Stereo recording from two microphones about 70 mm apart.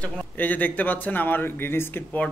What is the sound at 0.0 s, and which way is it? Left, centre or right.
Speech, left.